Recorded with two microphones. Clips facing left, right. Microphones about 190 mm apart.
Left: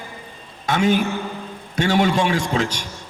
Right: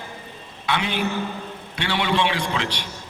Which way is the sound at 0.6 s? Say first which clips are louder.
Left 6 dB; 45° left (ahead or behind).